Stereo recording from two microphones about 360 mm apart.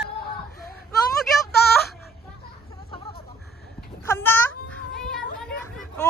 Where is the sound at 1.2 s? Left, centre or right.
Centre.